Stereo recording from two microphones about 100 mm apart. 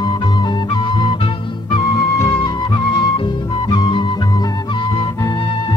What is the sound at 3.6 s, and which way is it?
Music, 55° left (ahead or behind).